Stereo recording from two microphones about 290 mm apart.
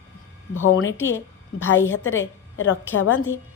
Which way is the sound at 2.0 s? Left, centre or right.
Left.